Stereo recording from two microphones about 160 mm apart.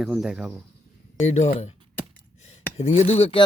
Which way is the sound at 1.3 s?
45° left (ahead or behind).